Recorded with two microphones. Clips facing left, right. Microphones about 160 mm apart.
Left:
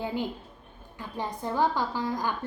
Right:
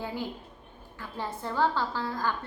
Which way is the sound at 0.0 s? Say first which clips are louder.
Left 3 dB; 20° left (ahead or behind).